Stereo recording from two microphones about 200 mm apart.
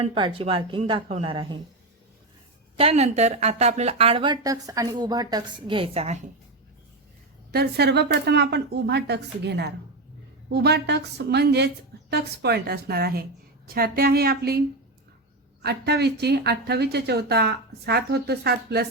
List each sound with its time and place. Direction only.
0.0 s a woman's voice: 30° right (ahead or behind)
2.7 s a woman's voice: 30° right (ahead or behind)
7.5 s speech: 55° right (ahead or behind)
15.6 s speech: 55° right (ahead or behind)